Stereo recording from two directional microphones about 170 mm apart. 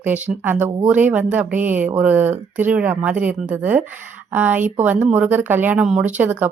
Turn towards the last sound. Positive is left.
turn(degrees=-10)  # may be behind; listen again after turning